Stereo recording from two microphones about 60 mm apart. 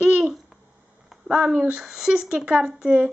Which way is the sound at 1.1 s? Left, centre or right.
Centre.